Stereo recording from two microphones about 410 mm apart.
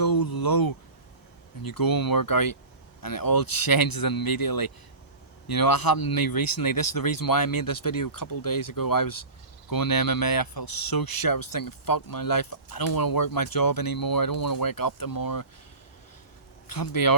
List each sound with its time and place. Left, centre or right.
0.0 s a sound: left
1.6 s speech: left
16.6 s speech: left